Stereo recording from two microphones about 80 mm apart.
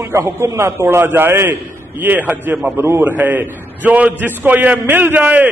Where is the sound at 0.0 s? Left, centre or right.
Right.